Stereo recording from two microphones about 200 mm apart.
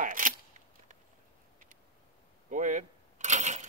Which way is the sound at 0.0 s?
40° right (ahead or behind).